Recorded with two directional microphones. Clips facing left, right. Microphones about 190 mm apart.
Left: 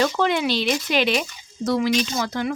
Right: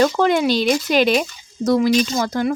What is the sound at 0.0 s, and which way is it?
Speech, 45° right (ahead or behind).